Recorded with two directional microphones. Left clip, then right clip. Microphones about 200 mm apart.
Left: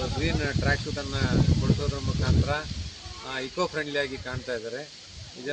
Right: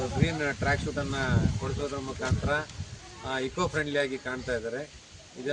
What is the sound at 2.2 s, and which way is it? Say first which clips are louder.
Speech: even; 15° right (ahead or behind).